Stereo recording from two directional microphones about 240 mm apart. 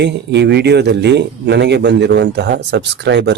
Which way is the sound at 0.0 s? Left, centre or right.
Right.